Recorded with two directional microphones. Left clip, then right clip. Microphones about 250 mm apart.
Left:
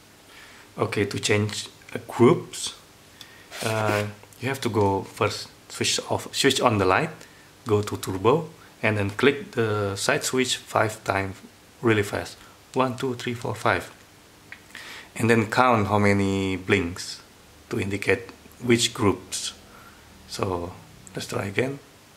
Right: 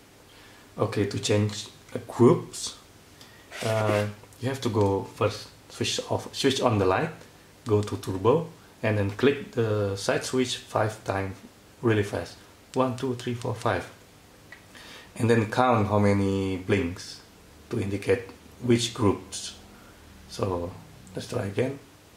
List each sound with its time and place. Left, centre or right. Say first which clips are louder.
0.7 s speech: left 2 dB; centre
15.1 s speech: left 3 dB; centre